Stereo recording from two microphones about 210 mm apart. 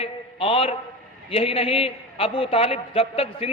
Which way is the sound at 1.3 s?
25° left (ahead or behind).